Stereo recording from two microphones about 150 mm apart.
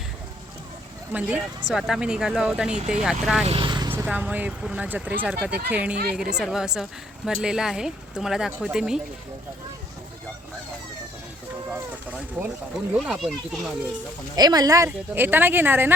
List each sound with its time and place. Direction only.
1.1 s speech: 5° right (ahead or behind)
3.4 s vehicle: 35° right (ahead or behind)
3.9 s speech: 10° right (ahead or behind)
5.5 s speech: 90° right
5.7 s speech: 10° right (ahead or behind)
12.4 s speech: 5° right (ahead or behind)
14.3 s speech: 25° right (ahead or behind)
14.8 s speech: 15° right (ahead or behind)